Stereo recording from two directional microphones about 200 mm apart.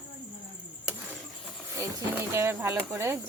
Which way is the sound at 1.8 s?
10° right (ahead or behind).